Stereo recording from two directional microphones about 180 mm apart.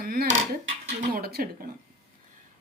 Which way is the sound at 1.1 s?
55° right (ahead or behind).